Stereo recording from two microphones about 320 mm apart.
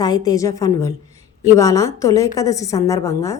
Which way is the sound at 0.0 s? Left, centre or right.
Centre.